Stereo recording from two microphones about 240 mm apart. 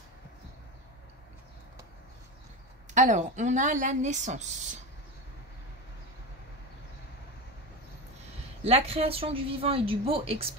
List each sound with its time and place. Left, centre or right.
2.9 s a woman's voice: right
8.6 s a woman's voice: right